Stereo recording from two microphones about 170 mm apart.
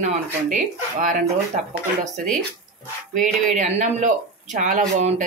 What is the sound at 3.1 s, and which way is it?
Speech, 50° right (ahead or behind).